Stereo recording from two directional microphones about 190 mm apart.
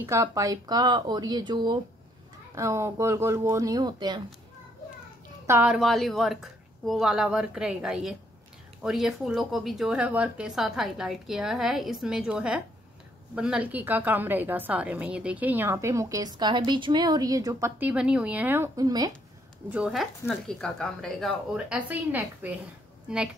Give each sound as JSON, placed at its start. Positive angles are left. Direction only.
{"t": 0.0, "sound": "a woman's voice", "side_deg": -15}
{"t": 5.5, "sound": "a woman's voice", "side_deg": -5}
{"t": 19.7, "sound": "speech", "side_deg": -5}